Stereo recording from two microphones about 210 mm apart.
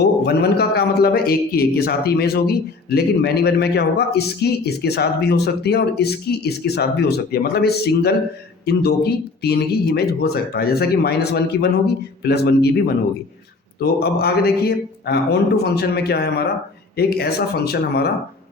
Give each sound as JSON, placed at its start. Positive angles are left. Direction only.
{"t": 0.0, "sound": "a man's voice", "side_deg": 50}